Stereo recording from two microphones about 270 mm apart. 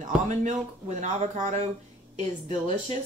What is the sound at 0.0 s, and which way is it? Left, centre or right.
Speech, right.